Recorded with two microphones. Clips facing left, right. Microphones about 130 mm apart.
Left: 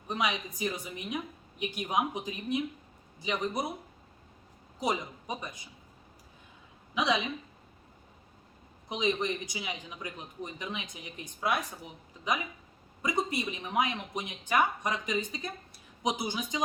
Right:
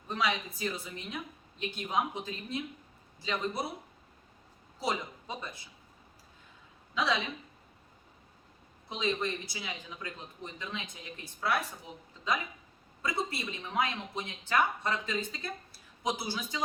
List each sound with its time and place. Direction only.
0.1 s a woman's voice: 15° left (ahead or behind)
4.8 s a woman's voice: 20° left (ahead or behind)
6.9 s a woman's voice: 15° left (ahead or behind)
8.9 s a woman's voice: 15° left (ahead or behind)
12.1 s a sound: 15° left (ahead or behind)
13.0 s a woman's voice: 15° left (ahead or behind)